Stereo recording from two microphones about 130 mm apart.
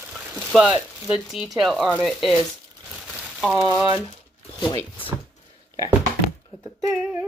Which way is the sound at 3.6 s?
25° right (ahead or behind).